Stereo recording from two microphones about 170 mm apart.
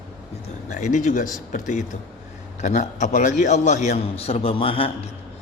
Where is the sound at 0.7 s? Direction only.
45° left (ahead or behind).